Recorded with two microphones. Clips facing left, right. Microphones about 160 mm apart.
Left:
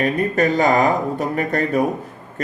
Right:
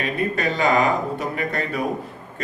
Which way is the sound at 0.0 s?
45° left (ahead or behind).